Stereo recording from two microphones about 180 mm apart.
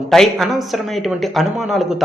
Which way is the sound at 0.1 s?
Centre (ahead or behind).